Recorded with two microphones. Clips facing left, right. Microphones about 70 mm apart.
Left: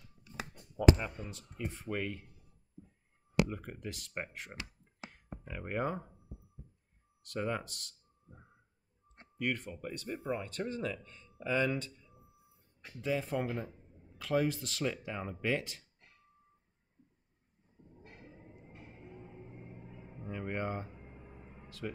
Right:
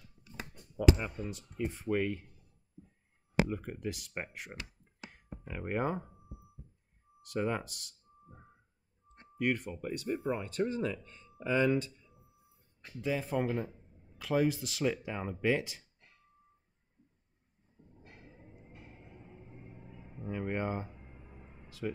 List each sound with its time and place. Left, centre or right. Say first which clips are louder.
1.3 s speech: right 5 dB; centre
3.4 s speech: right 5 dB; centre
7.2 s speech: right 2 dB; centre
9.4 s speech: right 4 dB; centre
13.0 s speech: right 1 dB; centre
20.2 s a sound: right 3 dB; centre
21.6 s speech: right 4 dB; centre